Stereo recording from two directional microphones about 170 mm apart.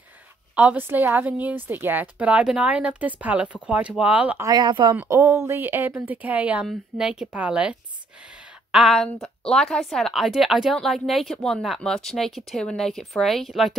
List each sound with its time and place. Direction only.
0.6 s a woman's voice: 10° right (ahead or behind)
4.5 s speech: 25° right (ahead or behind)
4.9 s a woman's voice: 15° right (ahead or behind)
8.7 s a woman's voice: centre (ahead or behind)